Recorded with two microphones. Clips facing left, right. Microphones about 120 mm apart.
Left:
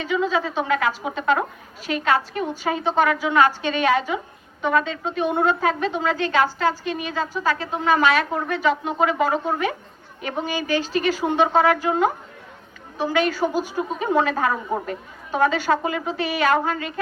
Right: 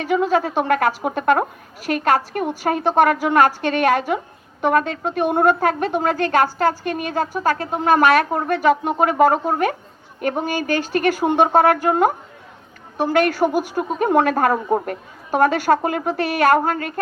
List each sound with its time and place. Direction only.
0.0 s a woman's voice: 50° right (ahead or behind)